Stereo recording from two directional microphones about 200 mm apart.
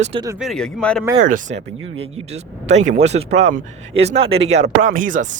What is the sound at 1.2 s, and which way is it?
Speech, 40° right (ahead or behind).